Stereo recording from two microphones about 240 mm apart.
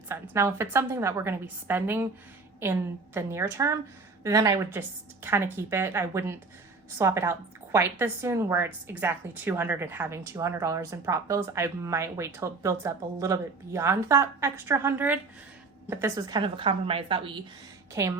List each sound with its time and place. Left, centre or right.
0.1 s a woman's voice: centre